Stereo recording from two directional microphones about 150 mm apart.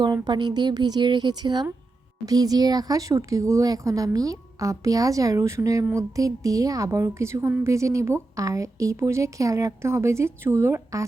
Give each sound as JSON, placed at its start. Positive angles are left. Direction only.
{"t": 0.0, "sound": "speech", "side_deg": -30}